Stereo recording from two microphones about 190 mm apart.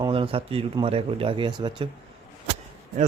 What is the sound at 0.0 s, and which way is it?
Speech, 30° right (ahead or behind).